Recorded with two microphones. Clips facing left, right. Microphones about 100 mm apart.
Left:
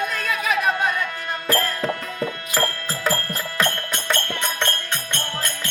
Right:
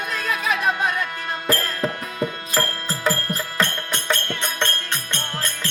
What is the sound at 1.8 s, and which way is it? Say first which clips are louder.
Music: right 1 dB; 10° right (ahead or behind).